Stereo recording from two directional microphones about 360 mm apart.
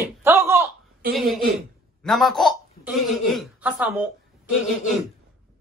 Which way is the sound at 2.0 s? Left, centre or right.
Centre.